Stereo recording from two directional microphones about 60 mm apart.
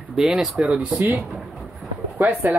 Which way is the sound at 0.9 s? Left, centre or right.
Right.